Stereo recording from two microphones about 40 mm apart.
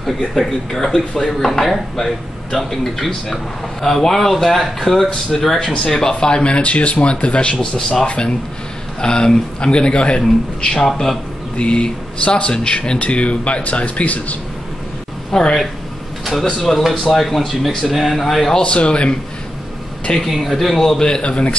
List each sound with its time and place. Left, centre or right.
0.0 s speech: centre
3.8 s speech: centre
5.6 s speech: centre
10.9 s speech: centre
11.5 s speech: left
15.3 s speech: centre
18.6 s speech: left
20.2 s speech: centre
21.0 s speech: left